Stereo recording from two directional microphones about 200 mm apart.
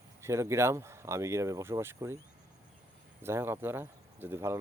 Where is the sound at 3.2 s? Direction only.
10° right (ahead or behind).